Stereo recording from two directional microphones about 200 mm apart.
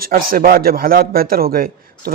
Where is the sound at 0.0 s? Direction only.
45° right (ahead or behind).